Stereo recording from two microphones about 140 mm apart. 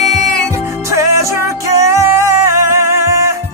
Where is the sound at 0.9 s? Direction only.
20° right (ahead or behind).